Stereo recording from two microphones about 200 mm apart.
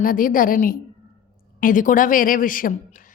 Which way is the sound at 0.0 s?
45° left (ahead or behind).